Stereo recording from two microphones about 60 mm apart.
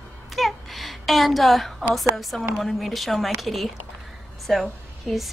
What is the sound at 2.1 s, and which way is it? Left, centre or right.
A woman's voice, centre.